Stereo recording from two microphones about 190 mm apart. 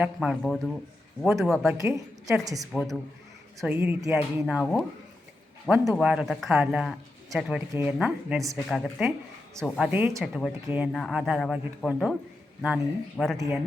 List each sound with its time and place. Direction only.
0.0 s a man's voice: 5° right (ahead or behind)
1.8 s a woman's voice: 15° right (ahead or behind)
2.7 s a man's voice: centre (ahead or behind)
5.6 s a man's voice: 10° right (ahead or behind)